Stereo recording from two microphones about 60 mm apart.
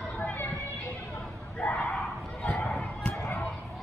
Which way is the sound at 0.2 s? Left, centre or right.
Left.